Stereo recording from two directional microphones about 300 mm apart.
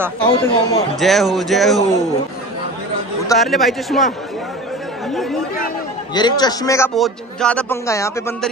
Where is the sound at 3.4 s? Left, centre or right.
Centre.